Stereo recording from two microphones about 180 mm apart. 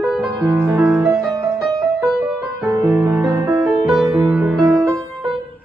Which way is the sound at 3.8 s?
Centre (ahead or behind).